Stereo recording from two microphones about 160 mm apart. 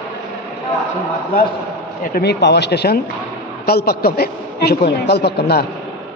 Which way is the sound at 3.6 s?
75° left (ahead or behind).